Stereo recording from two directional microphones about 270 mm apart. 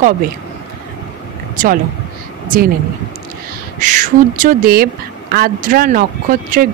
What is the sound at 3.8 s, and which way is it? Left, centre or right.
Speech, right.